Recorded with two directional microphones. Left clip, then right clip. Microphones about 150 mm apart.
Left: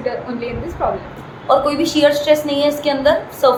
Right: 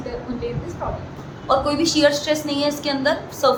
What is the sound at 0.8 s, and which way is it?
Speech, 30° left (ahead or behind).